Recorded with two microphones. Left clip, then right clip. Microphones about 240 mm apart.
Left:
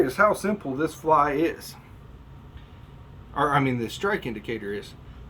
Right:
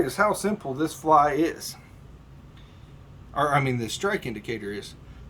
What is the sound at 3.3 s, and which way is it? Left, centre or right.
Speech, right.